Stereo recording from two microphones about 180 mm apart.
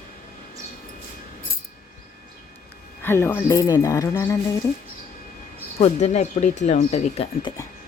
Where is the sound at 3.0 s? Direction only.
15° left (ahead or behind).